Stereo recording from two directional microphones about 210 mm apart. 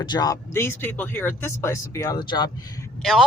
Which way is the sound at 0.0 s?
20° left (ahead or behind).